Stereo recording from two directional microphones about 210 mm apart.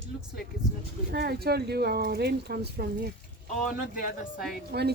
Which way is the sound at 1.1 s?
50° right (ahead or behind).